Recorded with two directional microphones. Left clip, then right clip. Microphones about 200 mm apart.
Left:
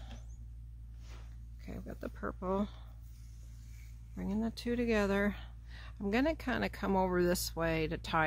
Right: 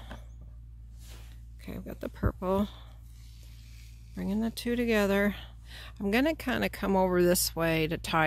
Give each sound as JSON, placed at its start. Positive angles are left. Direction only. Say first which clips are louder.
{"t": 1.6, "sound": "speech", "louder": "right 5 dB", "side_deg": -45}
{"t": 4.1, "sound": "speech", "louder": "right 5 dB", "side_deg": -45}